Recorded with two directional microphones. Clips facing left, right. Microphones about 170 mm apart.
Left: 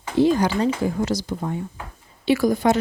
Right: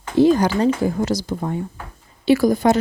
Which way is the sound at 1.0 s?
40° right (ahead or behind).